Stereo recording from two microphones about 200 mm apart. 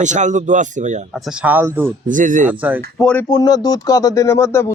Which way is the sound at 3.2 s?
20° left (ahead or behind).